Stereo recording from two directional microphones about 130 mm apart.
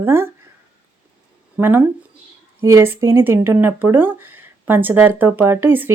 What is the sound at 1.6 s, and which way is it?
Speech, 15° right (ahead or behind).